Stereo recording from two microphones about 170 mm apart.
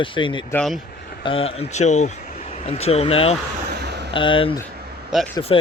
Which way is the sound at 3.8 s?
75° right (ahead or behind).